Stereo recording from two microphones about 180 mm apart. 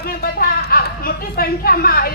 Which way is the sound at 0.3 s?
55° left (ahead or behind).